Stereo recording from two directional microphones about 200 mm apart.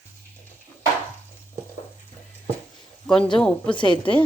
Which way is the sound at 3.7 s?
25° left (ahead or behind).